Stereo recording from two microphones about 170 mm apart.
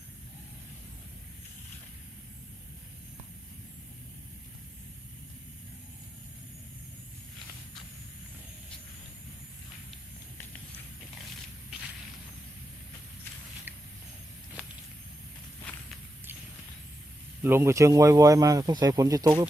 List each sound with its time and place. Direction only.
17.4 s speech: 15° right (ahead or behind)